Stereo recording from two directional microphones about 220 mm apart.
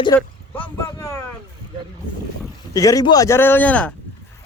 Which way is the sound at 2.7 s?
15° left (ahead or behind).